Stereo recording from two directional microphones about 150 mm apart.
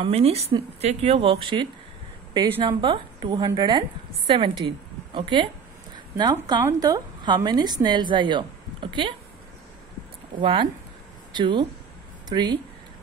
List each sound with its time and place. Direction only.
0.0 s a woman's voice: 40° right (ahead or behind)
5.9 s a sound: 25° right (ahead or behind)
6.6 s a woman's voice: 25° right (ahead or behind)
10.4 s speech: 35° right (ahead or behind)